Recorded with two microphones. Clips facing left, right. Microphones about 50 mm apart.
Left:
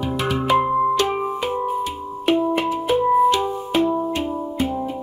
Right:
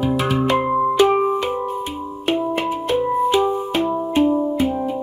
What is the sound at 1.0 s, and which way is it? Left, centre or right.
Music, centre.